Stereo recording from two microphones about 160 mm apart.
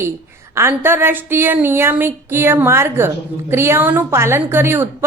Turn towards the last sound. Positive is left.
turn(degrees=-15)  # may be behind; listen again after turning